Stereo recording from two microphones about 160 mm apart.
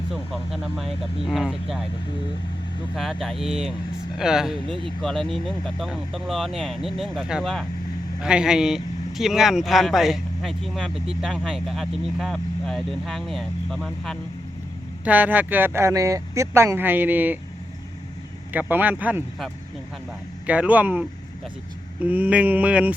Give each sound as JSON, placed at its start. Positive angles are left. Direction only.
{"t": 0.1, "sound": "speech", "side_deg": 0}
{"t": 2.9, "sound": "speech", "side_deg": 0}
{"t": 3.4, "sound": "speech", "side_deg": -40}
{"t": 4.2, "sound": "speech", "side_deg": -5}
{"t": 15.0, "sound": "speech", "side_deg": -10}
{"t": 18.5, "sound": "speech", "side_deg": -10}
{"t": 20.5, "sound": "speech", "side_deg": -10}